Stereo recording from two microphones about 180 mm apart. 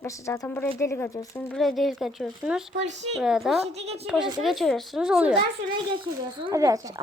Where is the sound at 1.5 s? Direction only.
Centre (ahead or behind).